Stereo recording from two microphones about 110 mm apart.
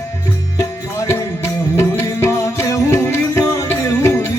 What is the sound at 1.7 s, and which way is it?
Music, 25° left (ahead or behind).